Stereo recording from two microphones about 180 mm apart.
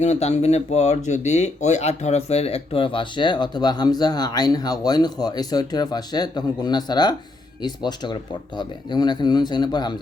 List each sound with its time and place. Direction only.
0.0 s speech: 40° left (ahead or behind)